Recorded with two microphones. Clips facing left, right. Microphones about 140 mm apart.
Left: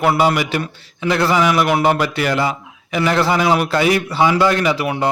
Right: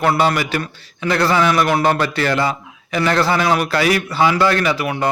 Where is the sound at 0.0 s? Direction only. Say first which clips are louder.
Left 1 dB; 15° left (ahead or behind).